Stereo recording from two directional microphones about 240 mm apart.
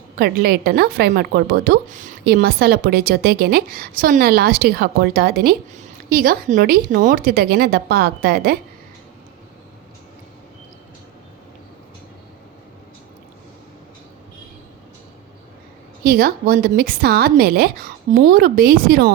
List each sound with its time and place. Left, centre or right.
0.2 s speech: right
16.0 s speech: right